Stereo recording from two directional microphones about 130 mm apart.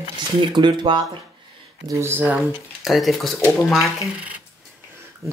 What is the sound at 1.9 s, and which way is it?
Speech, 20° right (ahead or behind).